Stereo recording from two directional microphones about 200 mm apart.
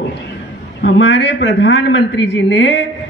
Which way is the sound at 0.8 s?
65° left (ahead or behind).